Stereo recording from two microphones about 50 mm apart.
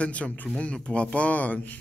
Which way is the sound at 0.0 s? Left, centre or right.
Left.